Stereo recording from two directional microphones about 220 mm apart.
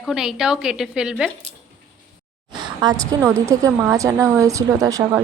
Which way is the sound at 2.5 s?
20° right (ahead or behind).